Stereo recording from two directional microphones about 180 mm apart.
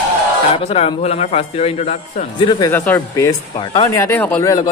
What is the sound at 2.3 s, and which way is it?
Speech, 25° left (ahead or behind).